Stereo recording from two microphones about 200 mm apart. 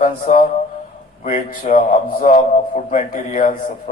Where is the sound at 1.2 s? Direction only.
35° left (ahead or behind).